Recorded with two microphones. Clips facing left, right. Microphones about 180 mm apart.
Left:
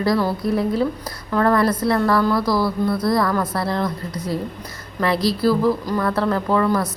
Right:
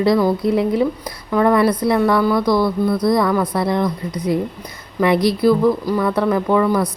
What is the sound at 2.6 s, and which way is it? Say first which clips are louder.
Speech: right 3 dB; 5° left (ahead or behind).